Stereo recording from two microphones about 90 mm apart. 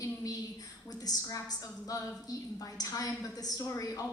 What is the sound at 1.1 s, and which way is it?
Speech, 45° left (ahead or behind).